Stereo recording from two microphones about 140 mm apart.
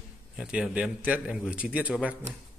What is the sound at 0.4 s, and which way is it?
A man's voice, 5° right (ahead or behind).